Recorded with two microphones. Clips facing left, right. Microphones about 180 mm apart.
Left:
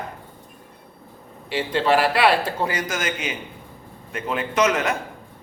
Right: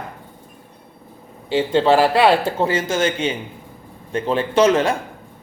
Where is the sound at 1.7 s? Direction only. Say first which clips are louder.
Right 4 dB; 25° right (ahead or behind).